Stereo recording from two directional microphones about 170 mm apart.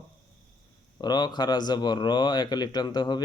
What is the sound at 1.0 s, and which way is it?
Speech, 25° left (ahead or behind).